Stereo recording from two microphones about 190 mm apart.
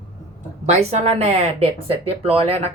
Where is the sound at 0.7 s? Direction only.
35° right (ahead or behind).